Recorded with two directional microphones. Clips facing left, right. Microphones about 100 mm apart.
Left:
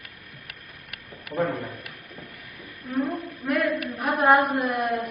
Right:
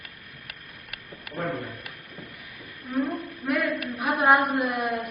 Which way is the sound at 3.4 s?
Centre (ahead or behind).